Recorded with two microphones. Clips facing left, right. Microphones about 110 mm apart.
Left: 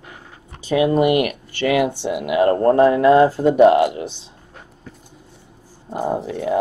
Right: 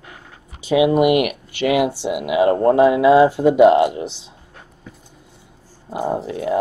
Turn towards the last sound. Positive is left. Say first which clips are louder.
# even
turn(degrees=0)  # may be behind; listen again after turning